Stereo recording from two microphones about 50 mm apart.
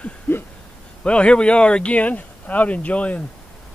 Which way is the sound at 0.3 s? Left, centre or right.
Left.